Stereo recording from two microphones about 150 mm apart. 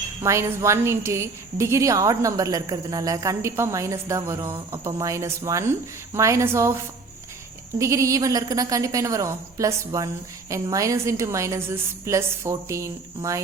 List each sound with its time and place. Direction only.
0.2 s a woman's voice: 20° right (ahead or behind)